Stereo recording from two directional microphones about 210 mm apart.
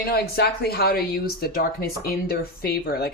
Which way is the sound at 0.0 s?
50° left (ahead or behind).